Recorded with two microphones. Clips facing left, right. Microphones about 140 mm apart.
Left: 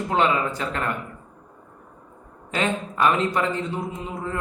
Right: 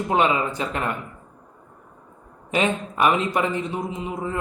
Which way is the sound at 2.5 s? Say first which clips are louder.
Right 2 dB; 15° right (ahead or behind).